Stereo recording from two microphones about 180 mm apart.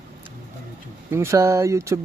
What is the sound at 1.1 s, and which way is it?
Speech, 15° right (ahead or behind).